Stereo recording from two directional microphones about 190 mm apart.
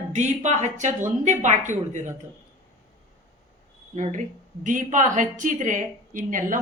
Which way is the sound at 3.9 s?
40° right (ahead or behind).